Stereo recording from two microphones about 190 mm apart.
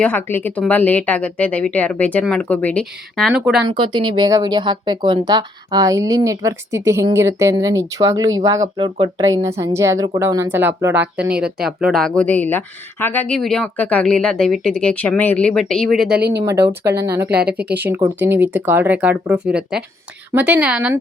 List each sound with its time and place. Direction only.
0.0 s speech: 10° left (ahead or behind)
3.7 s speech: 25° right (ahead or behind); by 16.2 s centre (ahead or behind)
16.4 s speech: 15° right (ahead or behind)
17.3 s speech: 5° right (ahead or behind)
17.6 s speech: 60° right (ahead or behind)
18.3 s speech: 10° right (ahead or behind)